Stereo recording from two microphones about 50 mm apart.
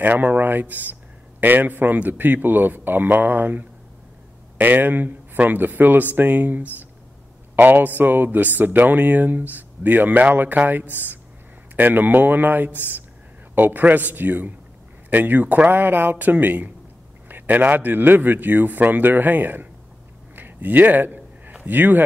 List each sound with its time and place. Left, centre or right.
0.0 s speech: right
20.3 s a sound: right
21.6 s speech: right